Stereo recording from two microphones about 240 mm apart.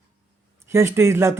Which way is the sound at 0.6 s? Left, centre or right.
Centre.